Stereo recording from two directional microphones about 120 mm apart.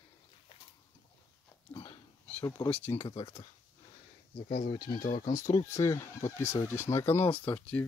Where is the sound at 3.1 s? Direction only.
55° left (ahead or behind).